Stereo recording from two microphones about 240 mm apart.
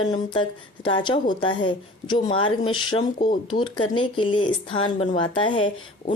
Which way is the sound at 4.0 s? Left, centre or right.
Left.